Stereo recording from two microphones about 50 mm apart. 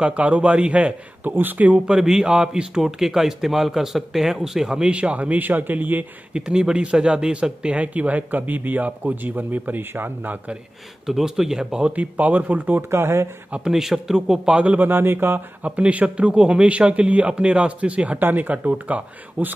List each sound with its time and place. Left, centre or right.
0.0 s a man's voice: right
1.2 s speech: right
1.9 s a man's voice: centre
4.9 s speech: right
6.3 s speech: centre; by 10.4 s right
11.1 s a man's voice: centre
11.9 s speech: right
12.9 s speech: right
13.7 s a man's voice: centre; by 14.8 s right
14.8 s speech: right
15.6 s a man's voice: right